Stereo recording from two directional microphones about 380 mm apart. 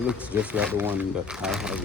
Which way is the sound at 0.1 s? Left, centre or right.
Centre.